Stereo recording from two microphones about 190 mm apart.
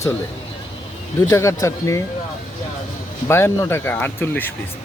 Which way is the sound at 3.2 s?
15° left (ahead or behind).